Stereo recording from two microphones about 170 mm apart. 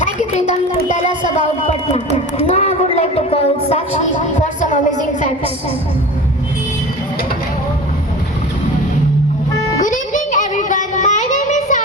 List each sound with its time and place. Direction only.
0.0 s speech: 45° left (ahead or behind)
2.5 s a woman's voice: 45° left (ahead or behind)
9.8 s a sound: 50° left (ahead or behind)